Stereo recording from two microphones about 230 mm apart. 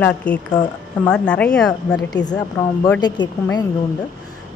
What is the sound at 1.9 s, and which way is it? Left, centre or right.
A woman's voice, centre.